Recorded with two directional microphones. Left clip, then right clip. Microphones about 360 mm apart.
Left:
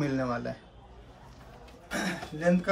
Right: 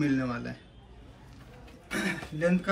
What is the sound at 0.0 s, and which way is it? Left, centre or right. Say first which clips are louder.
Speech: even; centre.